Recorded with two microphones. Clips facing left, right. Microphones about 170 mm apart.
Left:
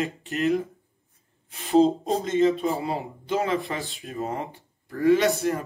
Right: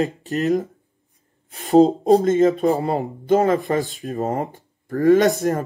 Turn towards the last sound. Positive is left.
turn(degrees=-45)  # may be behind; listen again after turning